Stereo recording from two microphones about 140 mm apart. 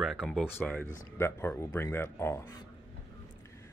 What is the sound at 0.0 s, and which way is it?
A man's voice, 5° left (ahead or behind).